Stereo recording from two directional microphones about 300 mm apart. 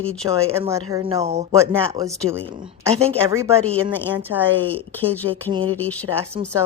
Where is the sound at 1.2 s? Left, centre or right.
Right.